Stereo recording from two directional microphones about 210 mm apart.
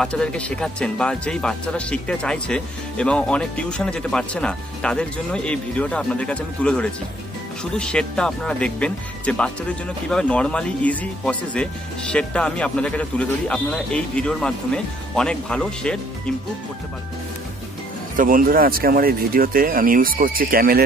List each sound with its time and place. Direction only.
0.0 s speech: 5° left (ahead or behind)
18.1 s speech: 40° right (ahead or behind)